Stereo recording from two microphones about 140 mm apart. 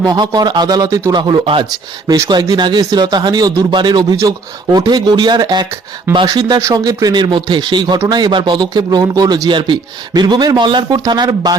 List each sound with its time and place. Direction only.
0.0 s speech: 30° right (ahead or behind)
2.0 s speech: 25° right (ahead or behind)